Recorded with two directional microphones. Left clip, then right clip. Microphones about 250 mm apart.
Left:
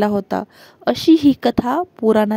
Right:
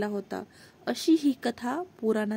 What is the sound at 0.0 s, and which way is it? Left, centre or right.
A woman's voice, left.